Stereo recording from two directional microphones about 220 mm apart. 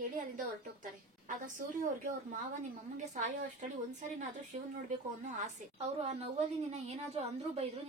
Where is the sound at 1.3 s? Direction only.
35° right (ahead or behind).